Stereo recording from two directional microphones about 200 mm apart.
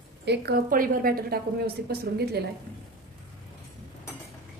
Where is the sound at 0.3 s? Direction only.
50° right (ahead or behind).